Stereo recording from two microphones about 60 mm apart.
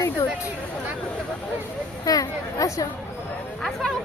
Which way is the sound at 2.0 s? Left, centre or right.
Left.